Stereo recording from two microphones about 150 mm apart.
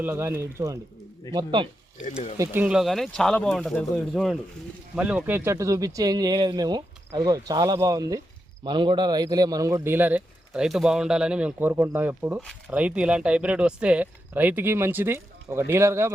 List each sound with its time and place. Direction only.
0.0 s speech: 15° right (ahead or behind)
1.3 s speech: 30° right (ahead or behind)
2.4 s speech: 15° right (ahead or behind)
4.9 s speech: 10° right (ahead or behind)